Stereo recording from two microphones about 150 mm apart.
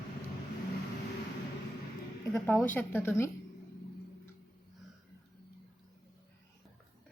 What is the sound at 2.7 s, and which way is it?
Speech, 15° left (ahead or behind).